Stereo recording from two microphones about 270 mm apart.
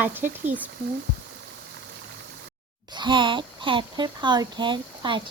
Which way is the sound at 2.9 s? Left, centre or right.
Centre.